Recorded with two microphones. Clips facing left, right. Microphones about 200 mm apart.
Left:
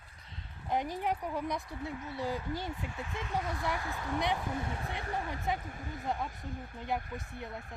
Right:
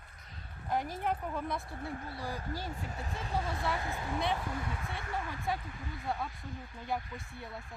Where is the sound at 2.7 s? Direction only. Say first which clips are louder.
Left 1 dB; 40° right (ahead or behind).